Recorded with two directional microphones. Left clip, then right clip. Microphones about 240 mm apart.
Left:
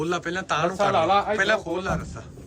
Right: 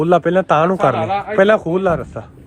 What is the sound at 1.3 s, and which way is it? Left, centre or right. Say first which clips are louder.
Speech: right 10 dB; centre.